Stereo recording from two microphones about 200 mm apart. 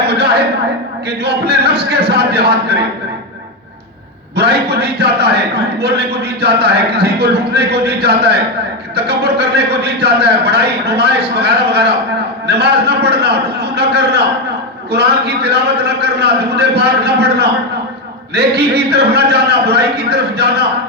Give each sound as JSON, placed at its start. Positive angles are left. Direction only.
{"t": 0.0, "sound": "a sound", "side_deg": -55}
{"t": 1.2, "sound": "a man's voice", "side_deg": -55}
{"t": 4.4, "sound": "a man's voice", "side_deg": -55}